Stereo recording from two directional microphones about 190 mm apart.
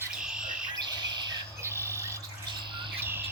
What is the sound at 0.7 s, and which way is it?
Chirp, 20° right (ahead or behind).